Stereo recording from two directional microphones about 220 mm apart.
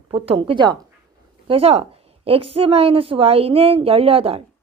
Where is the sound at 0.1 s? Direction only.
25° right (ahead or behind).